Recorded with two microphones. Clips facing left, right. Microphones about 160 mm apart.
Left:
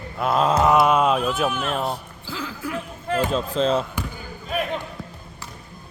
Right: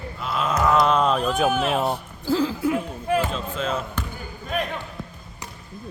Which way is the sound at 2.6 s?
20° right (ahead or behind).